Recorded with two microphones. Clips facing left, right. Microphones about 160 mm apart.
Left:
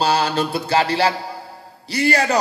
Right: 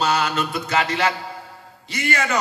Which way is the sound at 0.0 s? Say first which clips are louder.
Left 3 dB; 30° left (ahead or behind).